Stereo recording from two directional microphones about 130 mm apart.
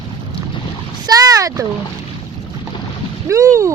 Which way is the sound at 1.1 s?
30° right (ahead or behind).